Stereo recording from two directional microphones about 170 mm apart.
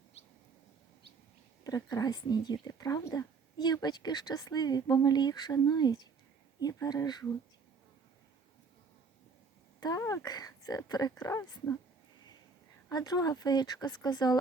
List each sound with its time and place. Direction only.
1.6 s speech: 20° left (ahead or behind)
9.8 s speech: 20° left (ahead or behind)
12.9 s speech: 20° left (ahead or behind)